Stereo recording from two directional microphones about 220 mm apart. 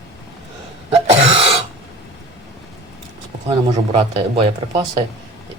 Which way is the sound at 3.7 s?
25° right (ahead or behind).